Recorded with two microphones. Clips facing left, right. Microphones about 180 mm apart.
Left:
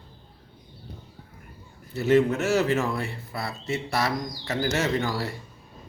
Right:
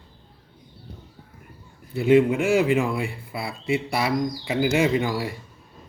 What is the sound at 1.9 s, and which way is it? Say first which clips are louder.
Speech: right 3 dB; 10° right (ahead or behind).